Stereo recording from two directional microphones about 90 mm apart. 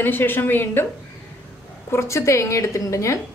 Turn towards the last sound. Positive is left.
turn(degrees=35)  # may be behind; listen again after turning